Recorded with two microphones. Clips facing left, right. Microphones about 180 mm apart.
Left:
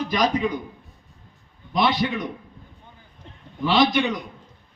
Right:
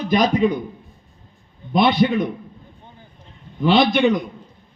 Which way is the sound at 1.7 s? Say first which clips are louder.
Right 5 dB; 55° right (ahead or behind).